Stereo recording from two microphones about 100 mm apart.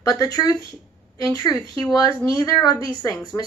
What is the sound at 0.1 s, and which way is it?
Speech, 40° left (ahead or behind).